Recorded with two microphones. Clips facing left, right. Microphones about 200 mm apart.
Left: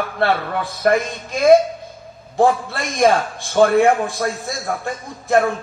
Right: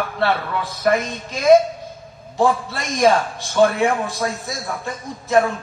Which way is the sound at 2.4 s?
50° left (ahead or behind).